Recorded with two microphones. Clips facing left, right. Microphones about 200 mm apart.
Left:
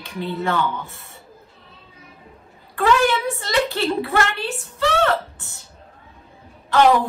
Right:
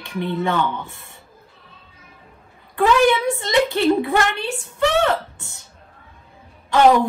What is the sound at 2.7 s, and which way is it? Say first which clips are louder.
Speech: right 2 dB; 15° right (ahead or behind).